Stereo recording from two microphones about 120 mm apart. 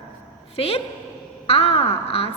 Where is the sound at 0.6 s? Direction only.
55° left (ahead or behind).